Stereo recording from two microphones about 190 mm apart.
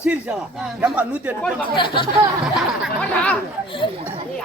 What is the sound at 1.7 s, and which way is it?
Speech, 25° left (ahead or behind).